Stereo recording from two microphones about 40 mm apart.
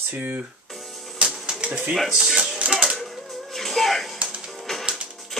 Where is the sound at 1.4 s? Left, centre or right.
Right.